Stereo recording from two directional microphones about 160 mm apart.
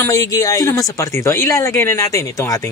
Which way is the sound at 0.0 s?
20° left (ahead or behind).